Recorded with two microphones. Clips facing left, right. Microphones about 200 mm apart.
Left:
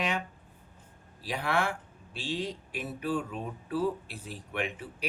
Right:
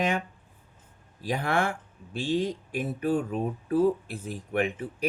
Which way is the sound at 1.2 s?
45° right (ahead or behind).